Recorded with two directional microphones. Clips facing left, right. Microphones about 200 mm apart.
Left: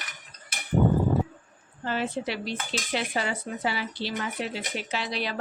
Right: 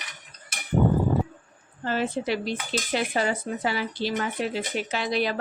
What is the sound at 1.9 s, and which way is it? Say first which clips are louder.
Speech: right 3 dB; 45° right (ahead or behind).